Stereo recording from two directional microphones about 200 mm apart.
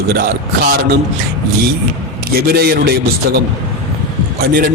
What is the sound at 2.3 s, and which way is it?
Speech, 50° right (ahead or behind).